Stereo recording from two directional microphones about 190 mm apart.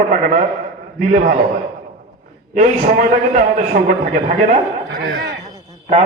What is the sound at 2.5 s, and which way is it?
A man's voice, 45° right (ahead or behind).